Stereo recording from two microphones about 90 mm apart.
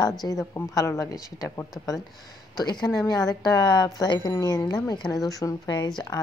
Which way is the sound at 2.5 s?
50° left (ahead or behind).